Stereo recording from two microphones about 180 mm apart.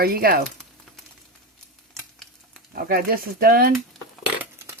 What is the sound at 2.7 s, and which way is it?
Speech, 55° right (ahead or behind).